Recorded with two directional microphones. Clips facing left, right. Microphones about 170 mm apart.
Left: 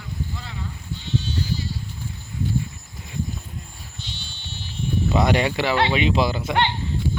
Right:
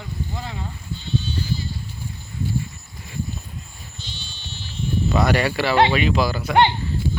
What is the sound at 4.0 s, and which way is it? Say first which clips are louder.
Sheep: even; 65° left (ahead or behind).